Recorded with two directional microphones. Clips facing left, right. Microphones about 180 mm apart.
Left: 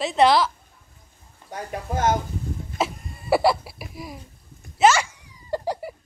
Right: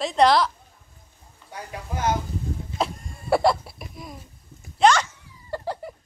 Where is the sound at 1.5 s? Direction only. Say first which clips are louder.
Left 5 dB; 45° left (ahead or behind).